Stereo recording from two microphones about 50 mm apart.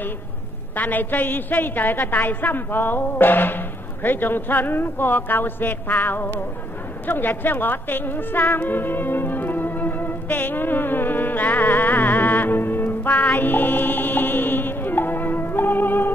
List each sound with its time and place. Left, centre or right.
0.7 s a woman's voice: left
7.1 s music: left